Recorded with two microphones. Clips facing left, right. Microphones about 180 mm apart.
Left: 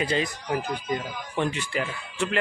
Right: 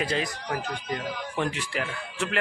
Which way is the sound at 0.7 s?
65° right (ahead or behind).